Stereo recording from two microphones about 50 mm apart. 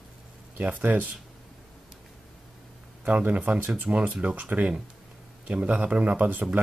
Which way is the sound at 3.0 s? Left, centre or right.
Right.